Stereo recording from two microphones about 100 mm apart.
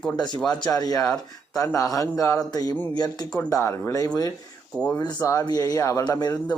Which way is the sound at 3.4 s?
30° left (ahead or behind).